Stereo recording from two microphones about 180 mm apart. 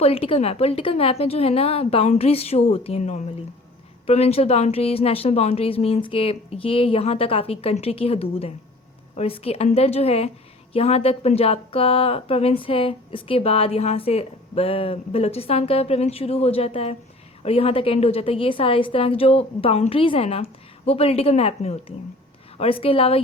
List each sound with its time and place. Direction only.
0.0 s a woman's voice: 30° left (ahead or behind)